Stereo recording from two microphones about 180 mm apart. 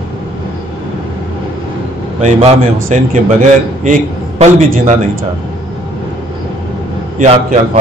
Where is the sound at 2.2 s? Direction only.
40° right (ahead or behind).